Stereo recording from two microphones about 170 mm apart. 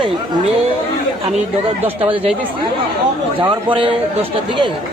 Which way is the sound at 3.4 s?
30° right (ahead or behind).